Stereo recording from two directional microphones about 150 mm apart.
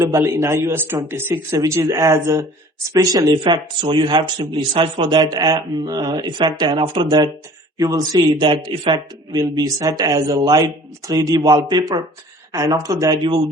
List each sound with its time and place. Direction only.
0.0 s a man's voice: 20° right (ahead or behind)